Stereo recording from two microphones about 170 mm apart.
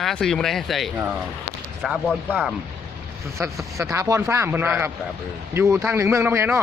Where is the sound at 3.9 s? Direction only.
15° right (ahead or behind).